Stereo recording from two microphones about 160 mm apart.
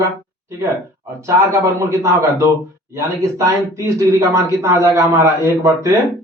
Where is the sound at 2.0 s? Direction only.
15° right (ahead or behind).